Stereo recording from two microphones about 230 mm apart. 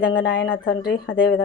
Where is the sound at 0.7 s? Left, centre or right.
Left.